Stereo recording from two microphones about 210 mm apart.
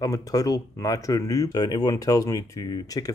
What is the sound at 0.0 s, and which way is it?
Speech, 15° left (ahead or behind).